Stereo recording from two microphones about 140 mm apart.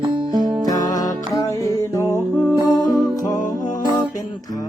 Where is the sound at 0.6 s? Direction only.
25° left (ahead or behind).